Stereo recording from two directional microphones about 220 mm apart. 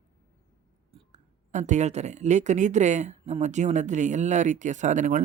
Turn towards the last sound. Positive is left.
turn(degrees=-35)  # may be behind; listen again after turning